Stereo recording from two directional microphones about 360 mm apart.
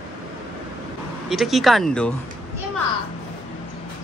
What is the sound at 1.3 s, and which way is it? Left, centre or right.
Speech, centre.